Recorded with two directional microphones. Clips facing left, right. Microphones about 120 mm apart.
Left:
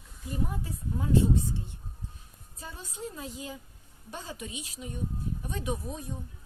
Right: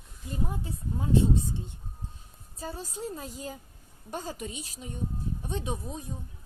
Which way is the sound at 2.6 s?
35° right (ahead or behind).